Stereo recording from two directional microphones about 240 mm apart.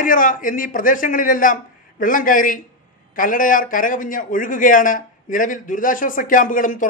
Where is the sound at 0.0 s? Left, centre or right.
Left.